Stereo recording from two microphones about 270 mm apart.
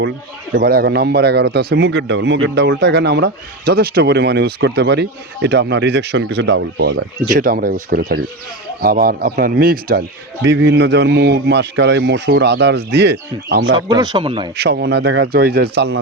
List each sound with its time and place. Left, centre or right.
0.5 s a man's voice: right
13.7 s speech: centre
14.5 s a man's voice: right